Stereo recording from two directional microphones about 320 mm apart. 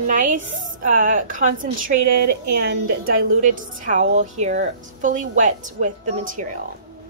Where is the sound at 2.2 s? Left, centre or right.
Right.